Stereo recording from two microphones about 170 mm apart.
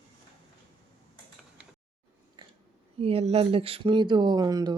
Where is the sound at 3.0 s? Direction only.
35° right (ahead or behind).